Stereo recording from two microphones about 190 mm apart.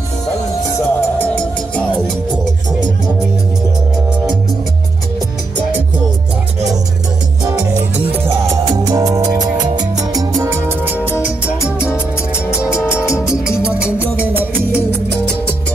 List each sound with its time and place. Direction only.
0.7 s music: 10° left (ahead or behind)
8.8 s music: 20° right (ahead or behind)
13.7 s music: 5° right (ahead or behind)